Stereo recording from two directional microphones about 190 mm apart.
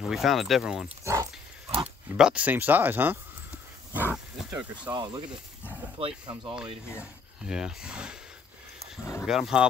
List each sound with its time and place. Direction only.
0.0 s speech: centre (ahead or behind)
1.0 s dog: 15° right (ahead or behind)
2.1 s speech: 5° right (ahead or behind)
4.9 s speech: 20° right (ahead or behind)
7.0 s speech: 5° right (ahead or behind)
9.2 s speech: 5° right (ahead or behind)